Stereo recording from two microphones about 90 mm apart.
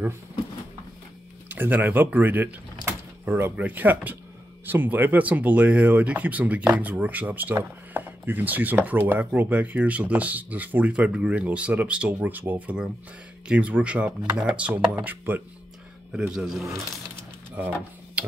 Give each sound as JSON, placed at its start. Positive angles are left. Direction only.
{"t": 1.5, "sound": "speech", "side_deg": -20}
{"t": 16.1, "sound": "speech", "side_deg": -5}
{"t": 17.6, "sound": "mechanisms", "side_deg": -20}